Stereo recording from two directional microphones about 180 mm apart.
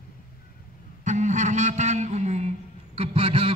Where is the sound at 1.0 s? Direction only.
40° right (ahead or behind).